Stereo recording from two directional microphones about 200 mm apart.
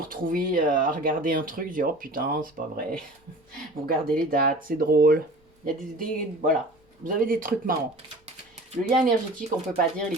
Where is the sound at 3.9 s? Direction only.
45° right (ahead or behind).